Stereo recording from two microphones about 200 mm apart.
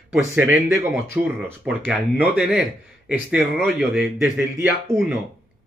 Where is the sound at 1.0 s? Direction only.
15° right (ahead or behind).